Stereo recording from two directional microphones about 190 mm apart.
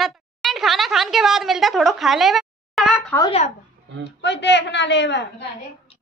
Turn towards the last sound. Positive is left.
turn(degrees=65)  # may be behind; listen again after turning